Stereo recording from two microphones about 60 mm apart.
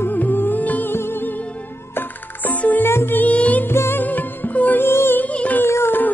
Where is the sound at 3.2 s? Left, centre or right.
Left.